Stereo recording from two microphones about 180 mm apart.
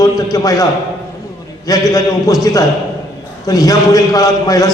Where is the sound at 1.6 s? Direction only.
20° left (ahead or behind).